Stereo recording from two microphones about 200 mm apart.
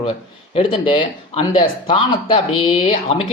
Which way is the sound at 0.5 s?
25° left (ahead or behind).